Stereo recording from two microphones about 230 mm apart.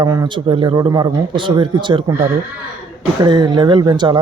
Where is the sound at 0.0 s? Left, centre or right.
Centre.